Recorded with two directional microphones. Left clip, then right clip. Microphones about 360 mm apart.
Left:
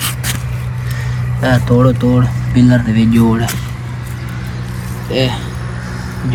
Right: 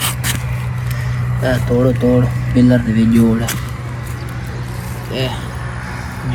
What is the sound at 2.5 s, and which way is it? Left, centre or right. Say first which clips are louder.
Speech: left 1 dB; centre.